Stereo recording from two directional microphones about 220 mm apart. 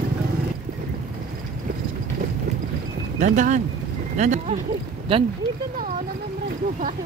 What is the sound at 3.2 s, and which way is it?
Speech, 35° right (ahead or behind).